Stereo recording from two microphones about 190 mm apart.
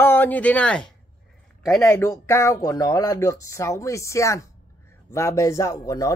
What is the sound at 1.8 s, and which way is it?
Speech, 15° left (ahead or behind).